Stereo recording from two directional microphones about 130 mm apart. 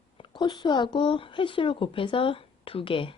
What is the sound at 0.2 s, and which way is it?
Speech, 35° left (ahead or behind).